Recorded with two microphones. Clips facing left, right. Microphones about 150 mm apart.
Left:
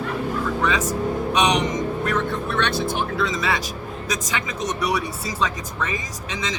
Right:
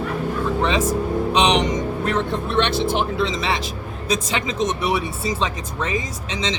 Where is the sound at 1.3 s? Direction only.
30° right (ahead or behind).